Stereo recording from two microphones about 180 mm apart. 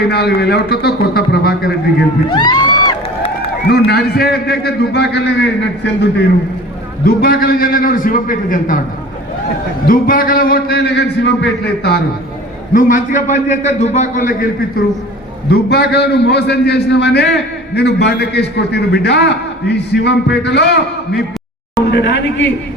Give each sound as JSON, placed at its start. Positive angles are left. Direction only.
{"t": 0.1, "sound": "a man's voice", "side_deg": 65}
{"t": 2.3, "sound": "a sound", "side_deg": 25}
{"t": 3.7, "sound": "a man's voice", "side_deg": 60}
{"t": 7.0, "sound": "a man's voice", "side_deg": 55}
{"t": 9.8, "sound": "a man's voice", "side_deg": 50}
{"t": 12.7, "sound": "a man's voice", "side_deg": 45}
{"t": 15.4, "sound": "a man's voice", "side_deg": 65}